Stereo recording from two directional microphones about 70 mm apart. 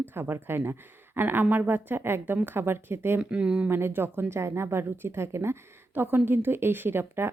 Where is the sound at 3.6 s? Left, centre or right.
Right.